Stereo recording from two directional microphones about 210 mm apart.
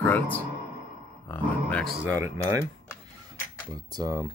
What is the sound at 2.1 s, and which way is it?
Speech, 15° right (ahead or behind).